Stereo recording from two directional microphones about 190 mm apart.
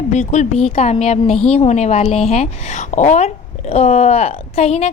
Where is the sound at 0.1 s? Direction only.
40° left (ahead or behind).